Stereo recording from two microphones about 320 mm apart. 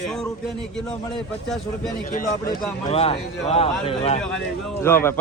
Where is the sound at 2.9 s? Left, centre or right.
Centre.